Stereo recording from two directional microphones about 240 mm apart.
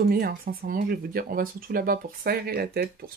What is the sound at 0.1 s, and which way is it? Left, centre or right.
Speech, right.